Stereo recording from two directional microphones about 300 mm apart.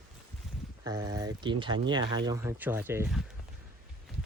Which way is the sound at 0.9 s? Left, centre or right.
Centre.